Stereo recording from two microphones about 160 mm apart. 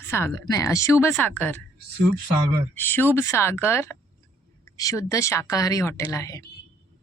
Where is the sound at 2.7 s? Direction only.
15° left (ahead or behind).